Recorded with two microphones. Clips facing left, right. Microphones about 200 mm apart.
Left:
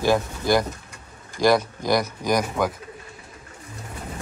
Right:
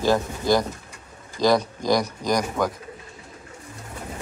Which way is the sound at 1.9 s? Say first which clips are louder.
Left 2 dB; 5° left (ahead or behind).